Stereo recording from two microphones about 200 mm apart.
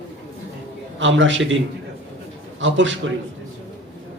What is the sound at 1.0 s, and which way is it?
Speech, 70° right (ahead or behind).